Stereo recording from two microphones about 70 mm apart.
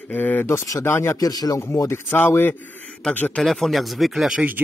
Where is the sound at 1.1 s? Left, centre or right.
Left.